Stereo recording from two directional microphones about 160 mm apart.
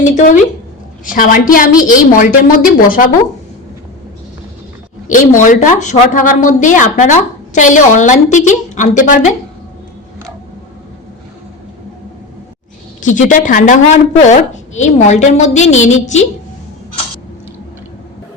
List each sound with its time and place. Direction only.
0.0 s a woman's voice: 50° left (ahead or behind)
5.1 s a woman's voice: 55° left (ahead or behind)
13.0 s a woman's voice: 50° left (ahead or behind)